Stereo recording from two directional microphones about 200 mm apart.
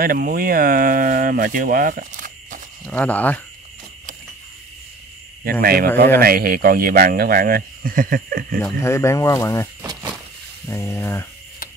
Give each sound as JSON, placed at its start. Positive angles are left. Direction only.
{"t": 0.0, "sound": "speech", "side_deg": -45}
{"t": 2.9, "sound": "speech", "side_deg": 5}
{"t": 5.4, "sound": "speech", "side_deg": -50}
{"t": 8.5, "sound": "speech", "side_deg": 10}
{"t": 10.7, "sound": "speech", "side_deg": 15}